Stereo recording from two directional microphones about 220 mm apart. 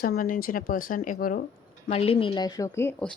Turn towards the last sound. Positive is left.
turn(degrees=5)  # may be behind; listen again after turning